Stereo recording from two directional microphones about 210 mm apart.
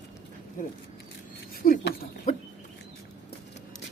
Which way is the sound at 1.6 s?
45° left (ahead or behind).